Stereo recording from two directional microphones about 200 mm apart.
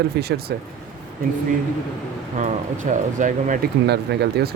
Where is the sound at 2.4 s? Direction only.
40° right (ahead or behind).